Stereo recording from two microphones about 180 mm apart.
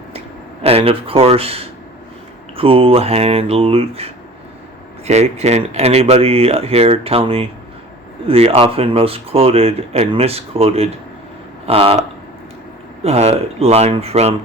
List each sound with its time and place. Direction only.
0.6 s speech: 30° right (ahead or behind)
13.0 s speech: 35° right (ahead or behind)